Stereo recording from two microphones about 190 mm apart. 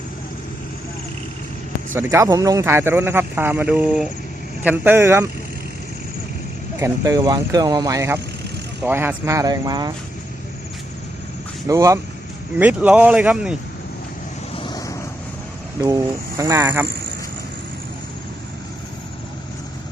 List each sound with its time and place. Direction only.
1.9 s speech: 15° right (ahead or behind)
6.7 s speech: 15° right (ahead or behind)
11.7 s speech: 15° right (ahead or behind)
14.5 s vehicle: 25° left (ahead or behind)
16.4 s speech: 15° right (ahead or behind)
16.8 s a sound: 60° right (ahead or behind)